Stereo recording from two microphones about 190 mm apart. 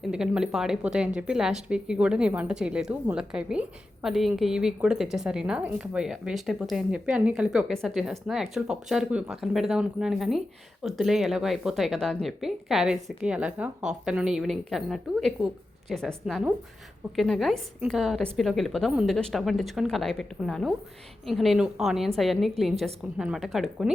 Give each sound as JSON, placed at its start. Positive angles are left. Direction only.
{"t": 0.1, "sound": "a woman's voice", "side_deg": -5}